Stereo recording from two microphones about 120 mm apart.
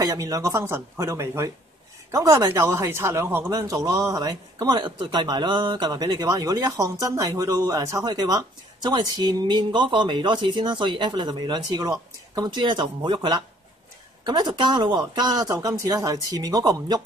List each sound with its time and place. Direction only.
0.0 s speech: 25° right (ahead or behind)
12.4 s speech: 40° right (ahead or behind)